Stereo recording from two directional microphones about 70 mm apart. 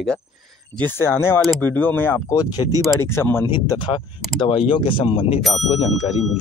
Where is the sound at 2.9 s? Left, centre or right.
Left.